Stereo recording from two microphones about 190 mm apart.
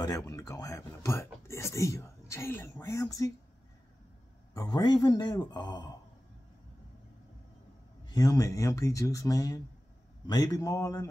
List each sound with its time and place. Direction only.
0.0 s a sound: 15° left (ahead or behind)
4.6 s a man's voice: 20° left (ahead or behind)
8.1 s a man's voice: 20° left (ahead or behind)